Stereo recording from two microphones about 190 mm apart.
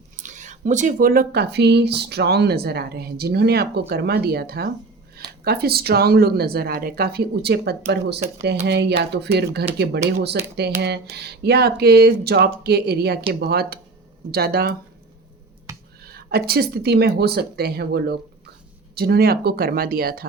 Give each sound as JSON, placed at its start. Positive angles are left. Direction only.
{"t": 0.2, "sound": "speech", "side_deg": -40}
{"t": 15.7, "sound": "a sound", "side_deg": -15}
{"t": 16.0, "sound": "speech", "side_deg": -55}